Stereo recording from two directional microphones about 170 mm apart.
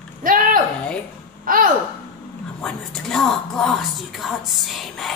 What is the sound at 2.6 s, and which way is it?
A woman's voice, centre (ahead or behind).